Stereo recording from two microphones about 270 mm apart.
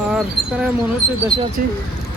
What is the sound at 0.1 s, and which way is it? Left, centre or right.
Speech, centre.